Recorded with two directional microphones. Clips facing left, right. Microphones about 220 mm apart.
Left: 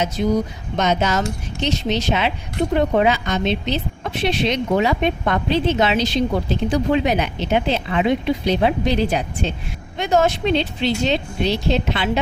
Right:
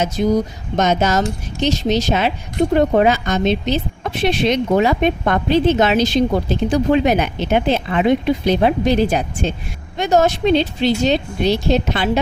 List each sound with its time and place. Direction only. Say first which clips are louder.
0.2 s speech: right 3 dB; 50° right (ahead or behind)